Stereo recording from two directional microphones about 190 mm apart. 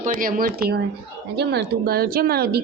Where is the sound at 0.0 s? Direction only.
45° right (ahead or behind).